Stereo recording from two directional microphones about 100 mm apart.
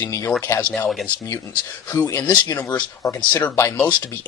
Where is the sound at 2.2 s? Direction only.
45° left (ahead or behind).